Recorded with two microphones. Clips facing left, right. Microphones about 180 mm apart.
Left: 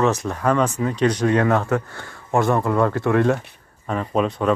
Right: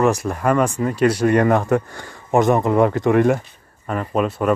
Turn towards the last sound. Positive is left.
turn(degrees=-5)  # may be behind; listen again after turning